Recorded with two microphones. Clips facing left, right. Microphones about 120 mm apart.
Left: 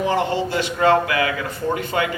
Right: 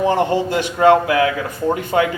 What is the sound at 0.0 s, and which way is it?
A man's voice, 20° right (ahead or behind).